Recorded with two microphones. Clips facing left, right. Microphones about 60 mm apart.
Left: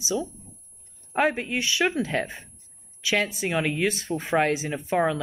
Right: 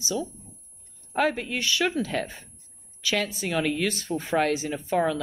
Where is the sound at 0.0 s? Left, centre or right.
Centre.